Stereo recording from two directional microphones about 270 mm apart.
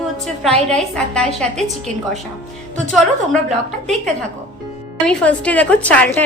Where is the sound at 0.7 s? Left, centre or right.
Centre.